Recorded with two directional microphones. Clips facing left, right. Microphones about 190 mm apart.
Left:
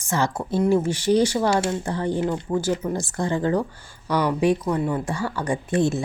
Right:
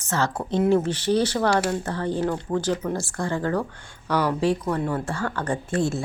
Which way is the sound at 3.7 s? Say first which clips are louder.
Left 1 dB; 5° left (ahead or behind).